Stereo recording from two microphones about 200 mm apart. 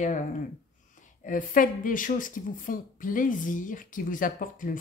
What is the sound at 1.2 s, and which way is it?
Speech, 40° left (ahead or behind).